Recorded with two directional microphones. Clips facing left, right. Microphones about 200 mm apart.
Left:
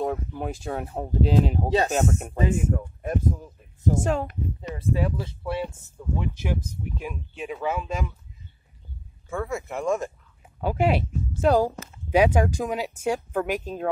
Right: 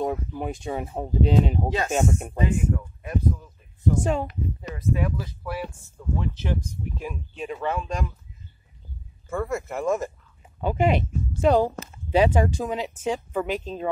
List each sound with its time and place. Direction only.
0.0 s speech: 5° right (ahead or behind)
2.4 s speech: 45° left (ahead or behind)
4.0 s speech: centre (ahead or behind)
4.6 s speech: 30° left (ahead or behind)
6.1 s speech: 15° left (ahead or behind)
9.3 s speech: centre (ahead or behind)